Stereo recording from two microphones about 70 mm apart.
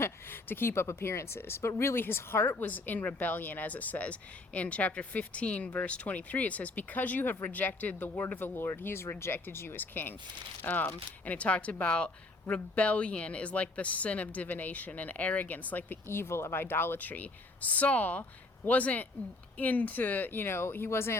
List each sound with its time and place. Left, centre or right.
0.0 s speech: left
16.0 s speech: left